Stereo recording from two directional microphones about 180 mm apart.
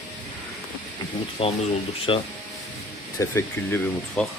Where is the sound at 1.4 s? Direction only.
30° left (ahead or behind).